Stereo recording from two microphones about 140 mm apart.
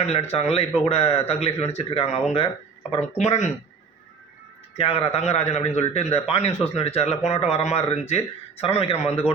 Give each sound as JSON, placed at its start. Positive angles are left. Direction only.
{"t": 0.0, "sound": "a man's voice", "side_deg": 50}
{"t": 4.8, "sound": "a man's voice", "side_deg": 40}